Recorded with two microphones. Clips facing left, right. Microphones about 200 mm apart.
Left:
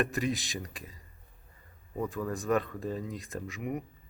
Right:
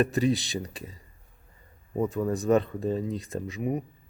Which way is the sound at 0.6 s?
30° right (ahead or behind).